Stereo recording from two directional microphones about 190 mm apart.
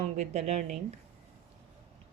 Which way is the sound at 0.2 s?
35° right (ahead or behind).